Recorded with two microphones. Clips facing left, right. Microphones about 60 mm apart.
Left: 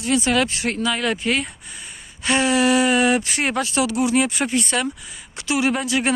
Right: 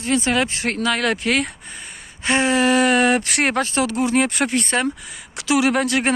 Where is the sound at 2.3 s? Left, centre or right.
Right.